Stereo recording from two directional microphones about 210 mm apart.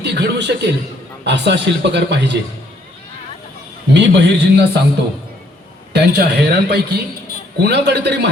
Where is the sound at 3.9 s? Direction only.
55° right (ahead or behind).